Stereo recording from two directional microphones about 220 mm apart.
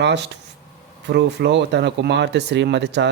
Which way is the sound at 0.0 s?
50° right (ahead or behind).